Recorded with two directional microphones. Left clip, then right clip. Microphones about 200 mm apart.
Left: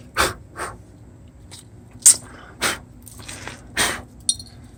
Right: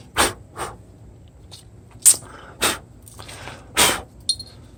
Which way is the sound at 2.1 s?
40° right (ahead or behind).